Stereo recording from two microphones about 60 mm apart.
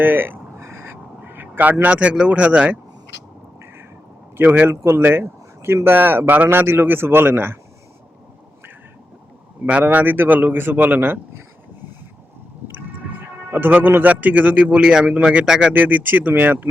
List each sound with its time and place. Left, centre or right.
0.0 s speech: right
0.5 s whispering: right
1.2 s speech: right
4.4 s speech: right
4.7 s speech: right
9.8 s speech: right
13.1 s a man's voice: right; by 15.7 s centre
15.7 s speech: right